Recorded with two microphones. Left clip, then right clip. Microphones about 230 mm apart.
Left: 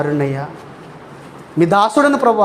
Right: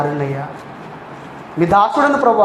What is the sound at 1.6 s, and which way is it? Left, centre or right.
Speech, left.